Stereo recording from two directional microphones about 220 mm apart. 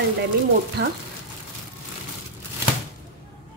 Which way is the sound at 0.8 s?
45° right (ahead or behind).